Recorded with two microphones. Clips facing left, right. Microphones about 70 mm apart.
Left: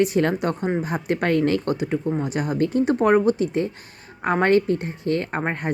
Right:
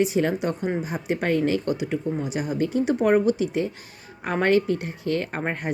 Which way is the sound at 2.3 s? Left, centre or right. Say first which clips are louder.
Left 2 dB; left.